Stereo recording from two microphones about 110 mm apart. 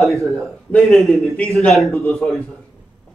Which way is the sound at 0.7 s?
5° left (ahead or behind).